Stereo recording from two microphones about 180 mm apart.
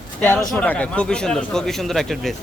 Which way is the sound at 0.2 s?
10° left (ahead or behind).